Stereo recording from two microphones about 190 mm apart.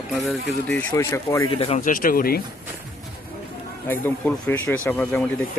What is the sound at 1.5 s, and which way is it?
Speech, 30° left (ahead or behind).